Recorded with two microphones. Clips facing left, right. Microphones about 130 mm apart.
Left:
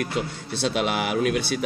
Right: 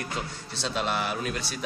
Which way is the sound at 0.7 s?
75° left (ahead or behind).